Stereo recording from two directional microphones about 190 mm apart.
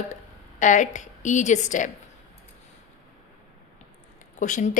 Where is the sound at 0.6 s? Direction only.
40° left (ahead or behind).